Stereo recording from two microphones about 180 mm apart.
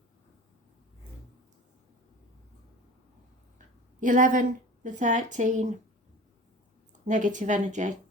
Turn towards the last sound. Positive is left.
turn(degrees=-45)  # may be behind; listen again after turning